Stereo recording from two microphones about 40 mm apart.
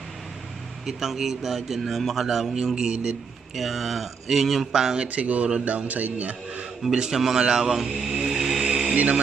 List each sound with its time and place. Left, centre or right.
0.8 s a man's voice: centre
2.5 s a man's voice: centre
3.5 s speech: centre
4.9 s a man's voice: right
7.0 s a man's voice: centre
8.6 s a sound: centre